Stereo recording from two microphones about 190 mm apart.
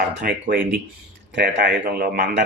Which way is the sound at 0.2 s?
50° right (ahead or behind).